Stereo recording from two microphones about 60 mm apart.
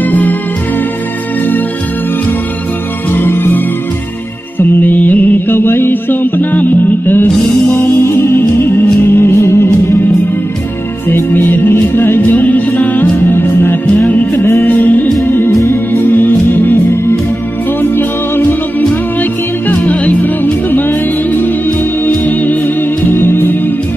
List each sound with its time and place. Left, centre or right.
0.0 s music: left
3.2 s music: left
8.0 s music: left
11.1 s music: left
17.9 s music: left
19.7 s music: left